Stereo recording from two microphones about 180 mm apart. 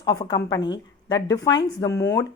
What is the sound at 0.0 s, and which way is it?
A woman's voice, 20° left (ahead or behind).